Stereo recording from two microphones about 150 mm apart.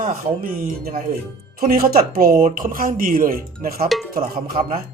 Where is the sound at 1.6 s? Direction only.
75° right (ahead or behind).